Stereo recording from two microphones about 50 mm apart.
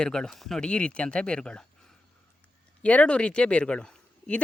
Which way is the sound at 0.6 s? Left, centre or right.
Left.